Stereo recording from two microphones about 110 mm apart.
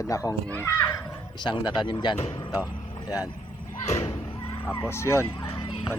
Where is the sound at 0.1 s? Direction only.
30° left (ahead or behind).